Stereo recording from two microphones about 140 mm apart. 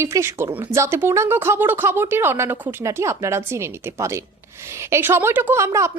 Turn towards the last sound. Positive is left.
turn(degrees=-20)  # may be behind; listen again after turning